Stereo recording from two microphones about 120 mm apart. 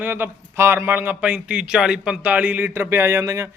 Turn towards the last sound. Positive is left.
turn(degrees=-25)  # may be behind; listen again after turning